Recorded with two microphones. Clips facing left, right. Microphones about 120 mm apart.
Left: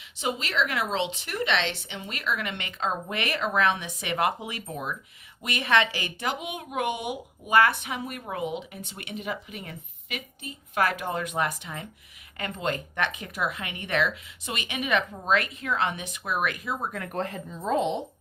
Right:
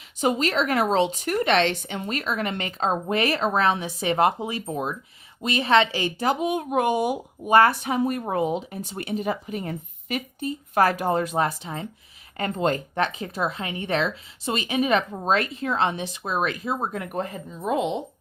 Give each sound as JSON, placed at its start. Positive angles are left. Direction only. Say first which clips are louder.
{"t": 0.2, "sound": "a woman's voice", "louder": "right 6 dB", "side_deg": -45}
{"t": 17.1, "sound": "speech", "louder": "right 2 dB", "side_deg": -5}